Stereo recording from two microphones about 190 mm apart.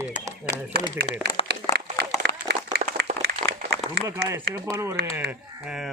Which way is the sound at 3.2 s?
60° right (ahead or behind).